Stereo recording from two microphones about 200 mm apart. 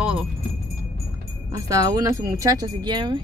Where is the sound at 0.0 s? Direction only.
5° right (ahead or behind).